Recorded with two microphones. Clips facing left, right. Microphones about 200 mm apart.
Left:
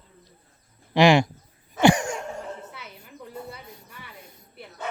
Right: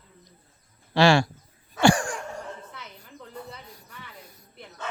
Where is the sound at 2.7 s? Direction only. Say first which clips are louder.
Left 1 dB; 10° left (ahead or behind).